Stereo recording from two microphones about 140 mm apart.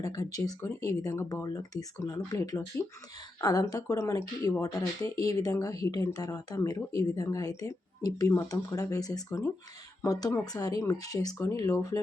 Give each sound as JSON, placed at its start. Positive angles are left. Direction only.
{"t": 0.0, "sound": "speech", "side_deg": 25}